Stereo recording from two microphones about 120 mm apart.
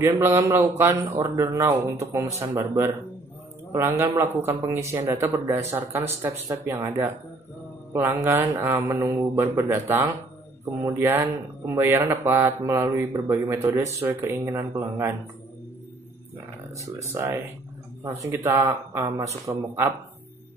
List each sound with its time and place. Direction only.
0.0 s speech: 20° right (ahead or behind)
16.7 s speech: 25° right (ahead or behind)
18.4 s speech: 20° right (ahead or behind)